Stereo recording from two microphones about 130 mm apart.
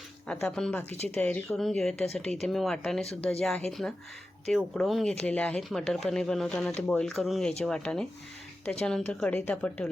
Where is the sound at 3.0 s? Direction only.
50° left (ahead or behind).